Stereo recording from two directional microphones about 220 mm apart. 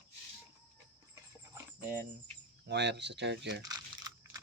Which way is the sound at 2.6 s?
50° right (ahead or behind).